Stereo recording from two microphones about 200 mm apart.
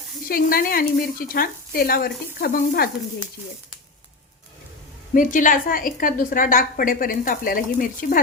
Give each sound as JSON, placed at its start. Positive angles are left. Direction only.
{"t": 0.3, "sound": "a woman's voice", "side_deg": 45}
{"t": 5.1, "sound": "a woman's voice", "side_deg": 40}